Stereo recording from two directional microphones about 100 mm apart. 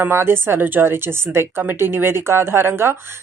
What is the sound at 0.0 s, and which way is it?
A woman's voice, 25° right (ahead or behind).